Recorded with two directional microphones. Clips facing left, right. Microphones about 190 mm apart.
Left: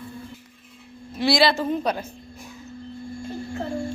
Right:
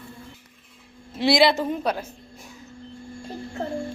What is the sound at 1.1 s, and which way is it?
Speech, 20° right (ahead or behind).